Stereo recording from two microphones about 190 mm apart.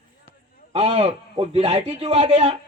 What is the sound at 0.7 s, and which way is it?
Speech, 30° right (ahead or behind).